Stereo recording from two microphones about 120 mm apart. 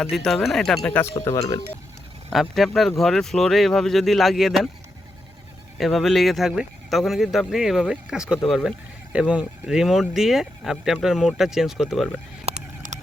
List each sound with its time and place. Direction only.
0.2 s speech: 5° left (ahead or behind)
1.2 s speech: 25° left (ahead or behind)
2.3 s speech: centre (ahead or behind)
5.7 s speech: centre (ahead or behind)
12.5 s a sound: 65° right (ahead or behind)